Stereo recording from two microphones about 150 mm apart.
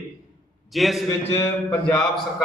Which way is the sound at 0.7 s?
Centre (ahead or behind).